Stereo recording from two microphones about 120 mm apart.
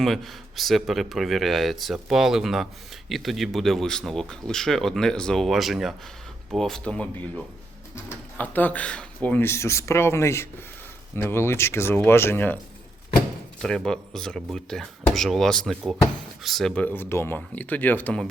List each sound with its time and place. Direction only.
0.0 s speech: centre (ahead or behind)
8.4 s speech: 15° left (ahead or behind)
13.6 s speech: 5° left (ahead or behind)
16.8 s speech: 15° left (ahead or behind)